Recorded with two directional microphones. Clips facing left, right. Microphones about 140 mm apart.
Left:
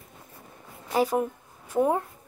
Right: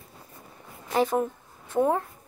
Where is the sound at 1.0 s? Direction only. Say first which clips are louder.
Even; 10° left (ahead or behind).